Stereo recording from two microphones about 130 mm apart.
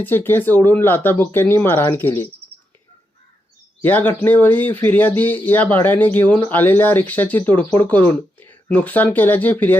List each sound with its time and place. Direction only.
0.0 s speech: 15° left (ahead or behind)
3.8 s speech: 15° left (ahead or behind)